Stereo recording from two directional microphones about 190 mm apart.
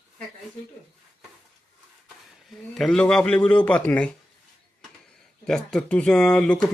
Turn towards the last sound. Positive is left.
turn(degrees=0)  # may be behind; listen again after turning